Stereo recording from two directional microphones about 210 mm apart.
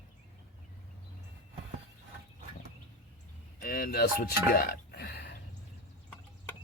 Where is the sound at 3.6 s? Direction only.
45° left (ahead or behind).